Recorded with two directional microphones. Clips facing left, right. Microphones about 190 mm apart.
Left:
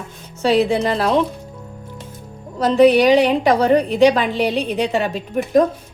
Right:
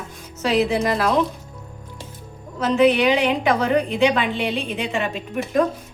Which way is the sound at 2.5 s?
35° left (ahead or behind).